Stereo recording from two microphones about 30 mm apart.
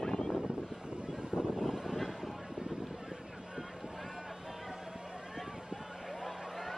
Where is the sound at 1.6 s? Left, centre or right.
Centre.